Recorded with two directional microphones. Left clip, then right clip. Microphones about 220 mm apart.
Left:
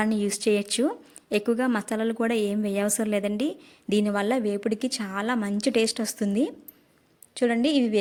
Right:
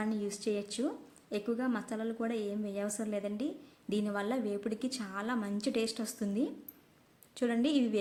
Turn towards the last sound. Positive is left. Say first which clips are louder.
# left 8 dB
turn(degrees=25)  # may be behind; listen again after turning